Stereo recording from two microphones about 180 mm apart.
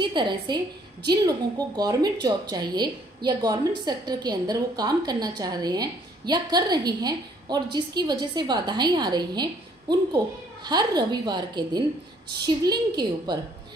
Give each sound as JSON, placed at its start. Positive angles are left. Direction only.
{"t": 0.0, "sound": "a woman's voice", "side_deg": -25}